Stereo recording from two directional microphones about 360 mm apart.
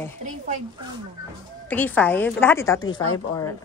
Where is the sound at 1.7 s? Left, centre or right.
Centre.